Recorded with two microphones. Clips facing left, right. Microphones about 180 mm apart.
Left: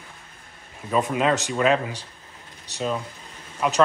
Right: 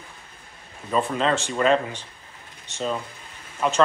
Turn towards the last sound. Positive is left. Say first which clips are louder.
# even
turn(degrees=5)  # may be behind; listen again after turning